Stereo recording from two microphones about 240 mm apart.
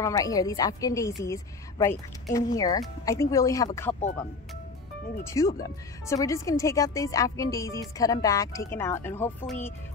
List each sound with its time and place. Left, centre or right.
0.0 s a woman's voice: centre
5.2 s speech: centre